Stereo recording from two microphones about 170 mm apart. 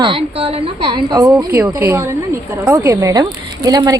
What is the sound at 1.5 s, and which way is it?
A woman's voice, 10° right (ahead or behind).